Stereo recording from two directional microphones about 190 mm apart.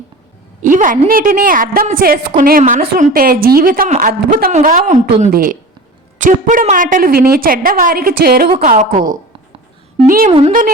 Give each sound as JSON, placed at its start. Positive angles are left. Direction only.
{"t": 0.6, "sound": "a woman's voice", "side_deg": -45}
{"t": 8.6, "sound": "a woman's voice", "side_deg": -45}